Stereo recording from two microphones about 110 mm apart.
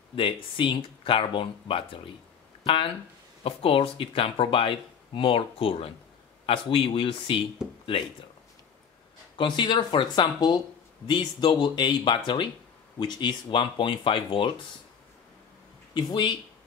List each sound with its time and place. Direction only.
0.1 s speech: 50° left (ahead or behind)
9.4 s speech: 45° left (ahead or behind)
15.9 s speech: 45° left (ahead or behind)